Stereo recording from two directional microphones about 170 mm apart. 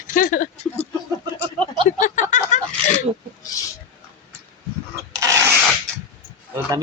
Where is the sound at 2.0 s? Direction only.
45° left (ahead or behind).